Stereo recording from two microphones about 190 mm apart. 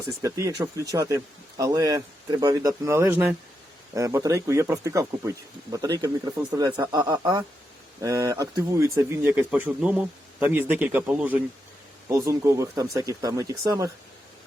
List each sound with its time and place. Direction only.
0.2 s speech: 15° right (ahead or behind)